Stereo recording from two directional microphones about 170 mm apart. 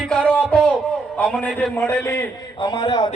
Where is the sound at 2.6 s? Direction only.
25° left (ahead or behind).